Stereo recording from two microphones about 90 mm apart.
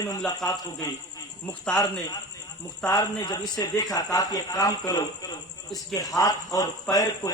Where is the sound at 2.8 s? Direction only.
45° left (ahead or behind).